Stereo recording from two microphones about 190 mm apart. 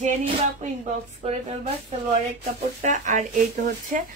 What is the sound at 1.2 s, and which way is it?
A woman's voice, 30° right (ahead or behind).